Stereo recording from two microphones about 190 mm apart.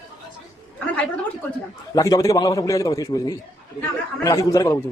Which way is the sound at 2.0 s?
20° left (ahead or behind).